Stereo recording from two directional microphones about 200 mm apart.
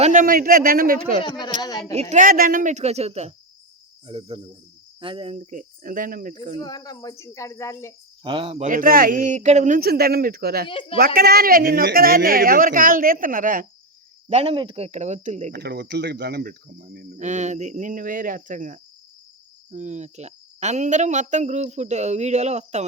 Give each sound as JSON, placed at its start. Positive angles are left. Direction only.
{"t": 0.0, "sound": "speech", "side_deg": -40}
{"t": 1.6, "sound": "speech", "side_deg": 20}
{"t": 2.0, "sound": "speech", "side_deg": -35}
{"t": 6.6, "sound": "speech", "side_deg": 20}
{"t": 8.2, "sound": "speech", "side_deg": -25}
{"t": 8.6, "sound": "speech", "side_deg": -40}
{"t": 10.7, "sound": "speech", "side_deg": 25}
{"t": 10.9, "sound": "speech", "side_deg": -45}
{"t": 14.3, "sound": "speech", "side_deg": -30}
{"t": 15.5, "sound": "speech", "side_deg": -55}
{"t": 17.2, "sound": "speech", "side_deg": -35}